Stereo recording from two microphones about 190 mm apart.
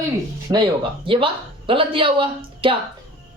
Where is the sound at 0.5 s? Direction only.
25° right (ahead or behind).